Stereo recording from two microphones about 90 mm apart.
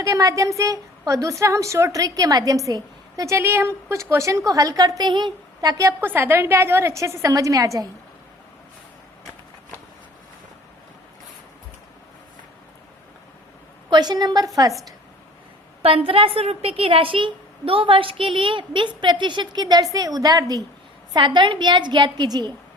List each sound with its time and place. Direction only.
0.0 s a woman's voice: 40° right (ahead or behind); by 5.7 s 55° right (ahead or behind)
6.0 s a woman's voice: 25° right (ahead or behind); by 7.9 s 40° right (ahead or behind)
13.9 s a woman's voice: 50° right (ahead or behind)
15.8 s a woman's voice: 90° right; by 20.7 s 45° right (ahead or behind)
21.1 s a woman's voice: 60° right (ahead or behind)